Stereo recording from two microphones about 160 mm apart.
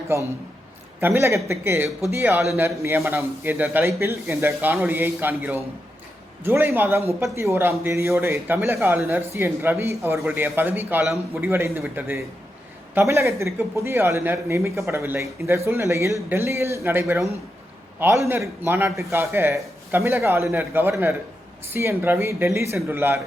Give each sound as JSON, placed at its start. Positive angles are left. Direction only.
{"t": 0.1, "sound": "speech", "side_deg": -15}